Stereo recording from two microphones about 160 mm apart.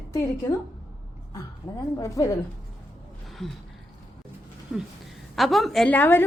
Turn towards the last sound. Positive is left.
turn(degrees=10)  # may be behind; listen again after turning